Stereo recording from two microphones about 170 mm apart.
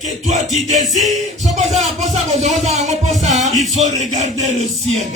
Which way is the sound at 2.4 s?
40° right (ahead or behind).